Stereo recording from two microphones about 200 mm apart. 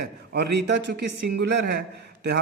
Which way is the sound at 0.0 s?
60° right (ahead or behind).